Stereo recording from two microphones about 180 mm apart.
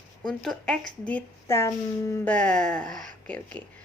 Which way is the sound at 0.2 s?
5° left (ahead or behind).